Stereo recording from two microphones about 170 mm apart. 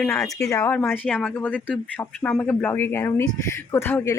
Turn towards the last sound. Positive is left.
turn(degrees=15)  # may be behind; listen again after turning